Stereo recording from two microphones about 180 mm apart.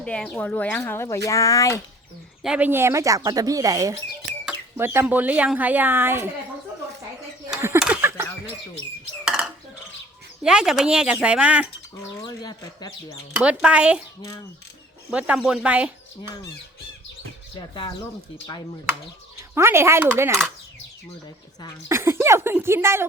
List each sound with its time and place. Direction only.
0.0 s speech: 5° left (ahead or behind)
2.4 s speech: 5° right (ahead or behind)
7.5 s a sound: 10° right (ahead or behind)
9.2 s dishes: 5° right (ahead or behind)
10.4 s speech: 5° right (ahead or behind)
12.2 s speech: 20° left (ahead or behind)
13.3 s speech: 5° right (ahead or behind)
14.2 s speech: 15° left (ahead or behind)
15.1 s speech: 5° right (ahead or behind)
19.5 s speech: 15° right (ahead or behind)
21.8 s speech: 15° right (ahead or behind)